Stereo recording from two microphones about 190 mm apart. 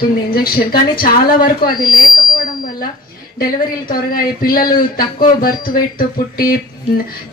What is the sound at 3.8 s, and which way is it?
A woman's voice, 50° left (ahead or behind).